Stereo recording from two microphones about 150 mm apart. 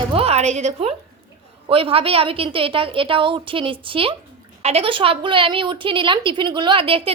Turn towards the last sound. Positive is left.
turn(degrees=-35)  # may be behind; listen again after turning